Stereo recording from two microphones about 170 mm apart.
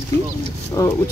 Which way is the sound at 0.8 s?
20° left (ahead or behind).